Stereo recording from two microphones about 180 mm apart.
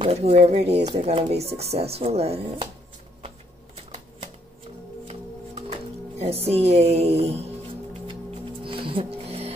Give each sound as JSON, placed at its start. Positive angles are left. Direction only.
{"t": 0.0, "sound": "speech", "side_deg": -35}
{"t": 5.0, "sound": "music", "side_deg": -35}